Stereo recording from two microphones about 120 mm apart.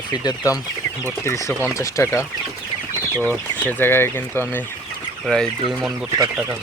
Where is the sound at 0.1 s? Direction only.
35° left (ahead or behind).